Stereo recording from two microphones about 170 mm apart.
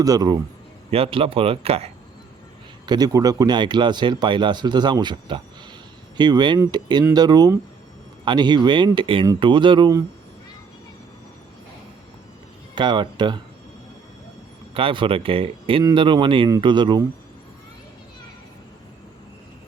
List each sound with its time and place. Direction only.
0.0 s speech: 20° right (ahead or behind)
0.9 s speech: 35° right (ahead or behind)
2.8 s speech: 25° right (ahead or behind)
12.7 s speech: 25° right (ahead or behind)
14.7 s speech: 30° right (ahead or behind)